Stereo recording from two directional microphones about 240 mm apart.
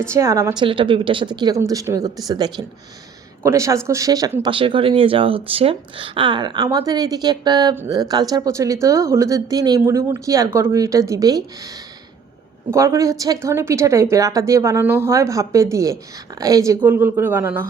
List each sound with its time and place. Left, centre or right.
0.0 s speech: centre
12.7 s speech: centre